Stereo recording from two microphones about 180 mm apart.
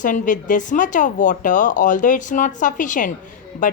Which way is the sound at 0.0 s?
45° left (ahead or behind).